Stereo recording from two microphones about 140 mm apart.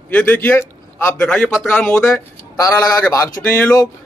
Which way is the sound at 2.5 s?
25° left (ahead or behind).